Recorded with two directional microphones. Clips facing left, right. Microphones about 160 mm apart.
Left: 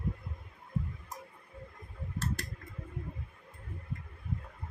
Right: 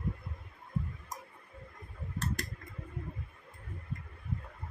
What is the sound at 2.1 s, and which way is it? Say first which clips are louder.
Mechanical fan: even; 15° right (ahead or behind).